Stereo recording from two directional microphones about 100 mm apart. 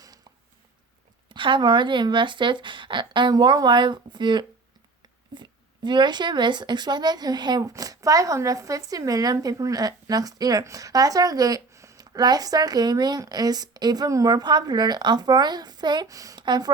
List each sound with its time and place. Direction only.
1.3 s speech: 55° right (ahead or behind)